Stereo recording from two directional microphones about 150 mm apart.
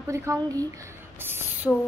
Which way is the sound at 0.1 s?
20° right (ahead or behind).